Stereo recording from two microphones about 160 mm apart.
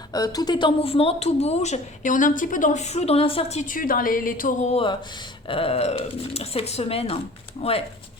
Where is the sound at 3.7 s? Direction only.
60° left (ahead or behind).